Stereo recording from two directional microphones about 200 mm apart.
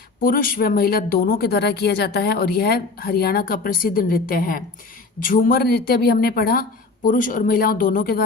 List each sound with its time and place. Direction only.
0.2 s speech: 45° left (ahead or behind)